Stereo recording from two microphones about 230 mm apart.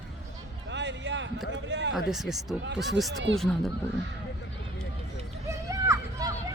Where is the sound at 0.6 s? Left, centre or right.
Right.